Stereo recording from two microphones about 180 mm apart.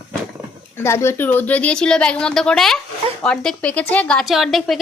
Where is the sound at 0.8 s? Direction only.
15° left (ahead or behind).